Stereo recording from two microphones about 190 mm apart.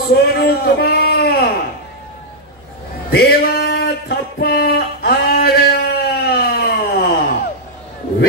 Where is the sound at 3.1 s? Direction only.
55° left (ahead or behind).